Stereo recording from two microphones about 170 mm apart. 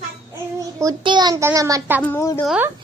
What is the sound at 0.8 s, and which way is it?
A child's voice, 25° right (ahead or behind).